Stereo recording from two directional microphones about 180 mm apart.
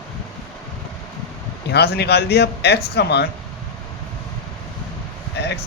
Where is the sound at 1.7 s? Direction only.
65° left (ahead or behind).